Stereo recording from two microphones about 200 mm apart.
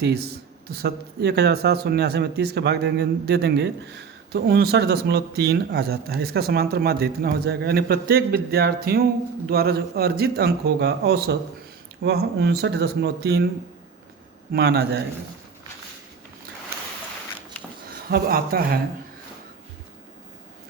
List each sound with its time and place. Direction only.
0.0 s speech: 55° right (ahead or behind)
14.5 s speech: 50° right (ahead or behind)
18.1 s speech: 50° right (ahead or behind)